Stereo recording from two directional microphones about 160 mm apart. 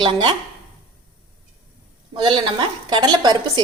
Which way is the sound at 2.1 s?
30° right (ahead or behind).